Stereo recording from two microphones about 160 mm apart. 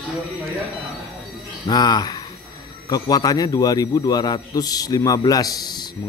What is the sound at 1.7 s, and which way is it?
A man's voice, 25° left (ahead or behind).